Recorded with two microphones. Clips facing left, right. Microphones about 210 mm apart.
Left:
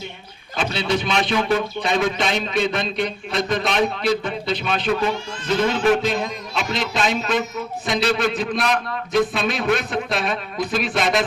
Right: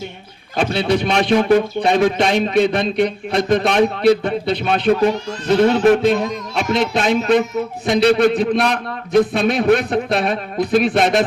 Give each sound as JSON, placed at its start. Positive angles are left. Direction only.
{"t": 0.5, "sound": "speech", "side_deg": -55}